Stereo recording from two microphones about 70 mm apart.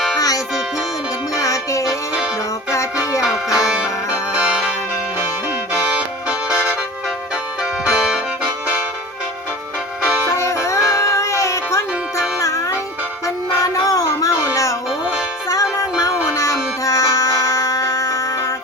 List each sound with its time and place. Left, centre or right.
0.2 s music: left
1.4 s music: left
3.2 s music: centre
5.1 s music: right
5.7 s music: centre
10.0 s music: right
10.3 s music: left